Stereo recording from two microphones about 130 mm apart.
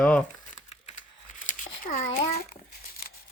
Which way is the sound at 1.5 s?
90° left.